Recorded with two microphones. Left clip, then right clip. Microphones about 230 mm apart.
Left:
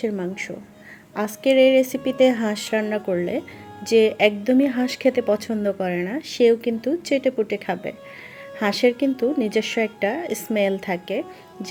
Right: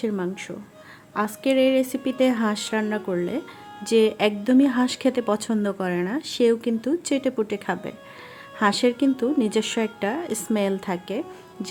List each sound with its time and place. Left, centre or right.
0.0 s a woman's voice: centre